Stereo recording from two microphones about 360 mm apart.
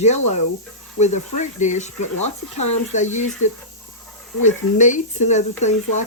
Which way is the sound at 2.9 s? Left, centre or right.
Centre.